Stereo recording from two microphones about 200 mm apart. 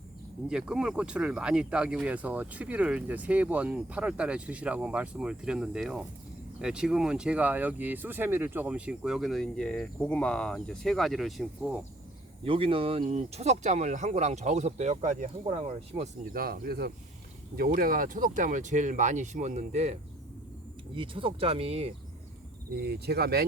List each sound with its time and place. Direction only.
0.4 s speech: 5° right (ahead or behind)
12.5 s speech: 25° right (ahead or behind)
16.2 s speech: 45° right (ahead or behind); by 21.9 s 30° right (ahead or behind)
22.7 s speech: 50° right (ahead or behind)